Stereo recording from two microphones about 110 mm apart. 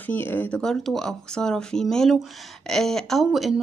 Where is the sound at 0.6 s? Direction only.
5° left (ahead or behind).